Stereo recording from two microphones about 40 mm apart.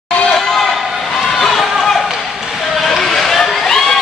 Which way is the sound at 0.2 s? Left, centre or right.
Centre.